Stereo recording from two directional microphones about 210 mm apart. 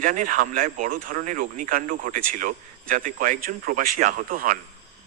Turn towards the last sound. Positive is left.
turn(degrees=-40)  # may be behind; listen again after turning